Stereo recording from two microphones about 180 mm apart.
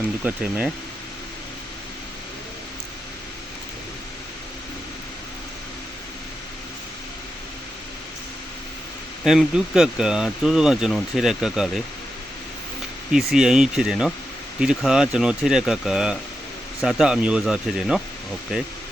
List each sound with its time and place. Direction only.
0.3 s speech: 10° right (ahead or behind)
9.2 s speech: centre (ahead or behind)
13.1 s speech: 5° right (ahead or behind)